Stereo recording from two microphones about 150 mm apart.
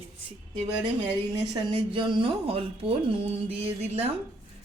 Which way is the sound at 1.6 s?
35° right (ahead or behind).